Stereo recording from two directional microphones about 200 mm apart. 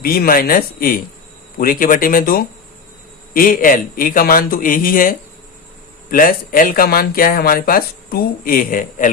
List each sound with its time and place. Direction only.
0.0 s speech: 50° left (ahead or behind)